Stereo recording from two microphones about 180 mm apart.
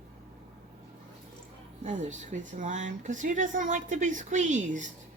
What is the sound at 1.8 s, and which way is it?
Speech, 40° right (ahead or behind).